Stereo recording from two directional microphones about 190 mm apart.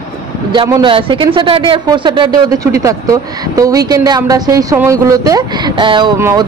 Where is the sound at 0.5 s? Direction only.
20° right (ahead or behind).